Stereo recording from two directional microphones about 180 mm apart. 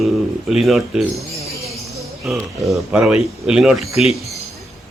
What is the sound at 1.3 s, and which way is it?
Jingle bell, 35° right (ahead or behind).